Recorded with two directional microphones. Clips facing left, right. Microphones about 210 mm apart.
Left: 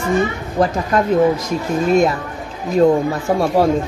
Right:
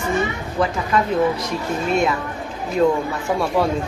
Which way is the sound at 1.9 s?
40° left (ahead or behind).